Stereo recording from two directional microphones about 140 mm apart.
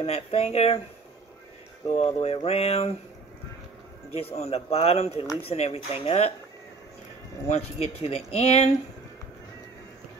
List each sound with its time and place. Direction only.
0.0 s speech: 45° left (ahead or behind)
2.0 s speech: 45° left (ahead or behind)
4.1 s speech: 45° left (ahead or behind)
7.4 s speech: 45° left (ahead or behind)